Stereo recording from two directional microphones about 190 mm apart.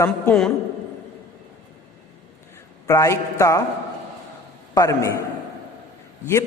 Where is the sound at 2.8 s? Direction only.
15° left (ahead or behind).